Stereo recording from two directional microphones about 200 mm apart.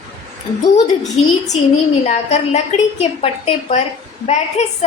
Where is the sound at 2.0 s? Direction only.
35° left (ahead or behind).